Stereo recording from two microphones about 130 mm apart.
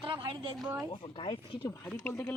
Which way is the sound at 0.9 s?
35° left (ahead or behind).